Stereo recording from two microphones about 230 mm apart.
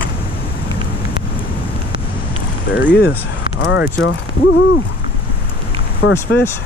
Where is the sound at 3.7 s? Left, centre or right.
Left.